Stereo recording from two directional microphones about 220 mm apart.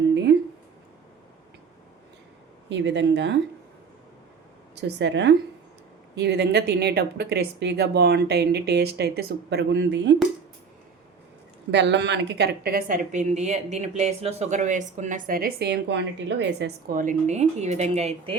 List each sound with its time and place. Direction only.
2.6 s speech: 50° right (ahead or behind)
4.7 s speech: 50° right (ahead or behind)
11.7 s a woman's voice: 50° right (ahead or behind); by 18.3 s 30° right (ahead or behind)